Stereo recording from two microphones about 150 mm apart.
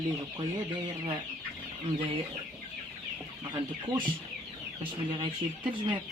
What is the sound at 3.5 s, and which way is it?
Speech, 30° right (ahead or behind).